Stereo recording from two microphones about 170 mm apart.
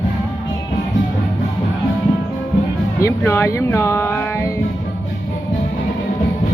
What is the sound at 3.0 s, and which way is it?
Speech, 15° left (ahead or behind).